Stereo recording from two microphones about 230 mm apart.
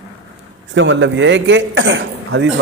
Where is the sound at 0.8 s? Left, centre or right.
Right.